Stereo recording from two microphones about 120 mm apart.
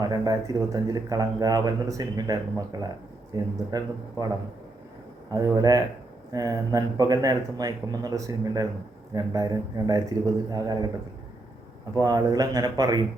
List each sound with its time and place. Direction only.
0.0 s speech: 30° right (ahead or behind)
5.3 s speech: 30° right (ahead or behind)
11.9 s speech: 30° right (ahead or behind)